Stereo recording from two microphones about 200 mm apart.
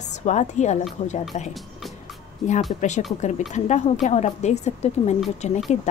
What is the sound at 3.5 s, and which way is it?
Speech, 35° left (ahead or behind).